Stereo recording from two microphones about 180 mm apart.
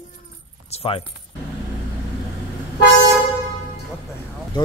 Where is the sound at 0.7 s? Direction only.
35° left (ahead or behind).